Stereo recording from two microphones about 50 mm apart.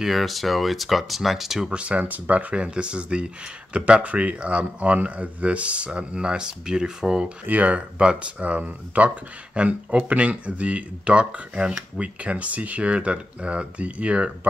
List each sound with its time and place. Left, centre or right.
0.0 s speech: centre
1.7 s speech: right
7.4 s speech: right